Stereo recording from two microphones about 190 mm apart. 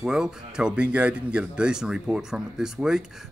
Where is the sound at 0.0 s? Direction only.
5° right (ahead or behind).